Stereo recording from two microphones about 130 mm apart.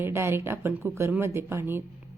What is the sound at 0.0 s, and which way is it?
A woman's voice, 20° right (ahead or behind).